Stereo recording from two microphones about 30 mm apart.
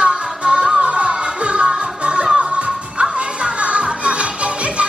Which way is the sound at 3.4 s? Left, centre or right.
Right.